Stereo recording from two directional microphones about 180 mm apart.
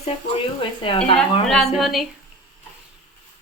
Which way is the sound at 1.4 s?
Centre (ahead or behind).